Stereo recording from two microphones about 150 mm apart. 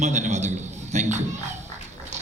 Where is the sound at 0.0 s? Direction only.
50° right (ahead or behind).